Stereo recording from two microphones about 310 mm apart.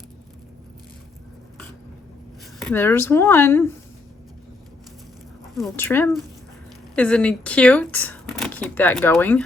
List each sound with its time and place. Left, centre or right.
2.6 s speech: centre
5.5 s speech: centre